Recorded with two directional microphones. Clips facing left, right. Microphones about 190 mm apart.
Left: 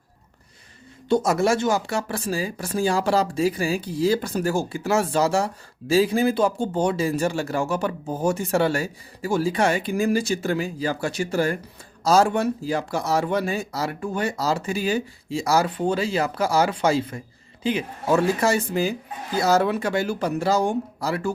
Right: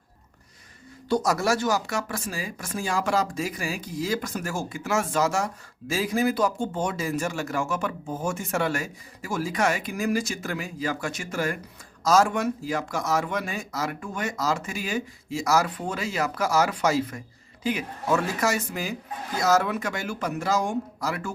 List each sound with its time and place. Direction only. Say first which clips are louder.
1.0 s speech: left 4 dB; 25° left (ahead or behind)